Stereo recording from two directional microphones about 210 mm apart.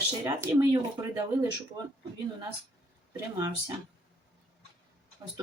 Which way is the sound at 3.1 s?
15° right (ahead or behind).